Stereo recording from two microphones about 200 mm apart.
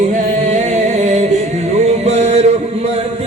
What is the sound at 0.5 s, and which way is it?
Music, 35° right (ahead or behind).